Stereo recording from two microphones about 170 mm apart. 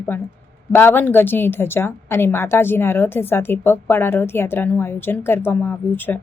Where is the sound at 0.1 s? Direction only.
10° left (ahead or behind).